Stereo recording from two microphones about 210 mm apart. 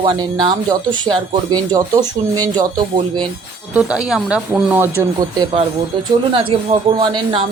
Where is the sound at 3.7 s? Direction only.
5° right (ahead or behind).